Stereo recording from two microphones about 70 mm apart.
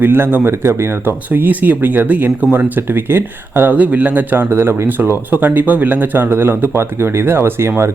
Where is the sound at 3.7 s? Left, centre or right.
Right.